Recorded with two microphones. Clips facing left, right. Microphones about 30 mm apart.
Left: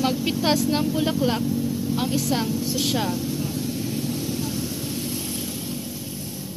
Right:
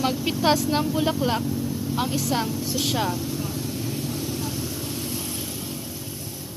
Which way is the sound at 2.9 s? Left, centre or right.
Centre.